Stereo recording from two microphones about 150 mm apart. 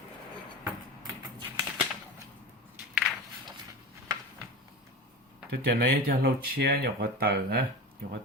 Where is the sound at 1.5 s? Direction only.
15° right (ahead or behind).